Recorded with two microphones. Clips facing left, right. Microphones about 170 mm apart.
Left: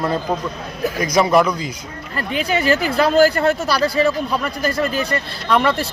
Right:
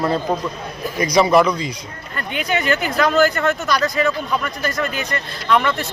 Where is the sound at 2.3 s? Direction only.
30° left (ahead or behind).